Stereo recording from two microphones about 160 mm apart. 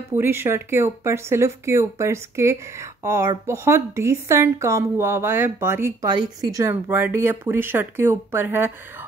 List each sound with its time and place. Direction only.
0.1 s speech: 15° right (ahead or behind)
6.0 s speech: 25° right (ahead or behind)